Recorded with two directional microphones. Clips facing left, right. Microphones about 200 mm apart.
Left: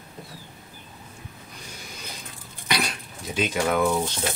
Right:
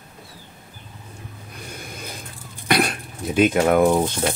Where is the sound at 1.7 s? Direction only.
55° right (ahead or behind).